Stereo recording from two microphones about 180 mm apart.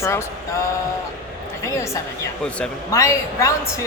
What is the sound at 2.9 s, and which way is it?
Speech, 15° left (ahead or behind).